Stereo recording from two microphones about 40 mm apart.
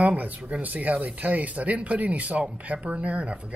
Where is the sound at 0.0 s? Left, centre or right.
Right.